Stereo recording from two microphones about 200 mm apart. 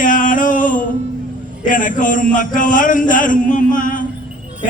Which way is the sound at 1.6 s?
40° left (ahead or behind).